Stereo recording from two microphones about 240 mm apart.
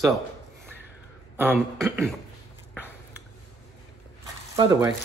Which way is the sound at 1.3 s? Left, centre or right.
Centre.